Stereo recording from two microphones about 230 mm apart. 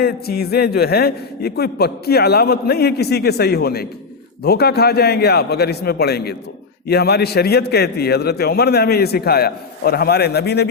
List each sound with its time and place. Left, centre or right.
0.0 s a man's voice: left